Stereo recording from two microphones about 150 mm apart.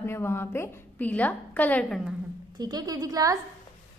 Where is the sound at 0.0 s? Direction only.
15° left (ahead or behind).